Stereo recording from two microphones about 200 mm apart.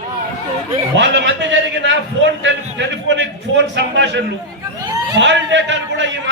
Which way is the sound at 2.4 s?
65° right (ahead or behind).